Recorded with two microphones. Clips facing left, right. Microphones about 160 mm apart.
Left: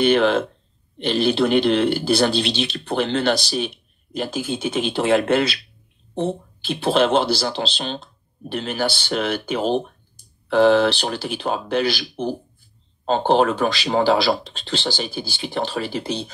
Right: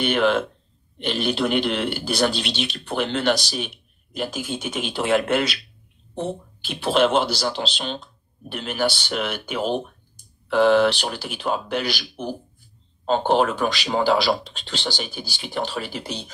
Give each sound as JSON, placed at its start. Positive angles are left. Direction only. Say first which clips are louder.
{"t": 0.0, "sound": "speech", "louder": "left 3 dB", "side_deg": 30}